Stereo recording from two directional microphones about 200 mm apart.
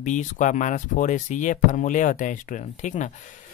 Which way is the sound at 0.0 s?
40° left (ahead or behind).